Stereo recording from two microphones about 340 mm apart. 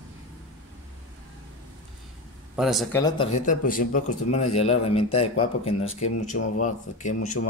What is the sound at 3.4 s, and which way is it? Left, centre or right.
Speech, left.